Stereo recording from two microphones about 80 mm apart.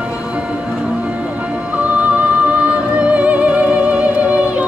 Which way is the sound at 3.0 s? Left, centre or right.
Centre.